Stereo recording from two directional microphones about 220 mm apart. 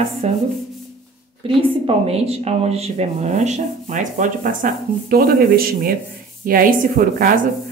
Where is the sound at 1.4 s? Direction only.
25° right (ahead or behind); by 7.4 s 40° right (ahead or behind).